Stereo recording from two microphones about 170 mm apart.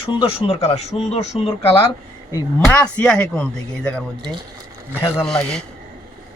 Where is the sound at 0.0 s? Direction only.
35° left (ahead or behind).